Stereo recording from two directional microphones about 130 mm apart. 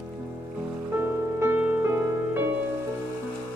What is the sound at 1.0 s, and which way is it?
Music, 15° right (ahead or behind).